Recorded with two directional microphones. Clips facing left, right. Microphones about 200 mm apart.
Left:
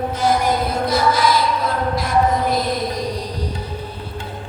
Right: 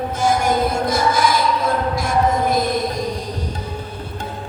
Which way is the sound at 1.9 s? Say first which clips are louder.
Even; 50° right (ahead or behind).